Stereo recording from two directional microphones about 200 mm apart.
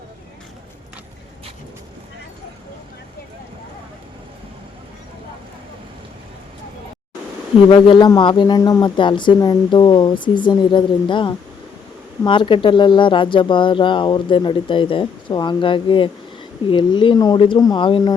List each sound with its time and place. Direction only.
7.7 s speech: 25° left (ahead or behind)